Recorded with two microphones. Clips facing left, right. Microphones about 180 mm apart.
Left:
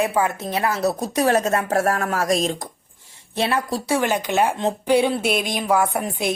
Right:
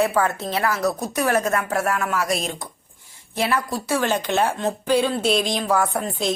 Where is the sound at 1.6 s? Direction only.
40° left (ahead or behind).